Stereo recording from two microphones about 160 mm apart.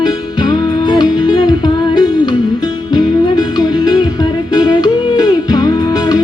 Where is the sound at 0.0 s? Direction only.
25° left (ahead or behind).